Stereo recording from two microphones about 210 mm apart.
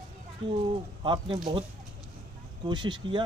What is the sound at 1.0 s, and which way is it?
Speech, 20° right (ahead or behind).